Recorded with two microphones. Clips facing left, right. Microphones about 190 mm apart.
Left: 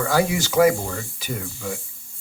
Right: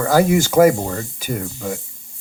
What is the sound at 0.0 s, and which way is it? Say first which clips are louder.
Speech: right 6 dB; 45° right (ahead or behind).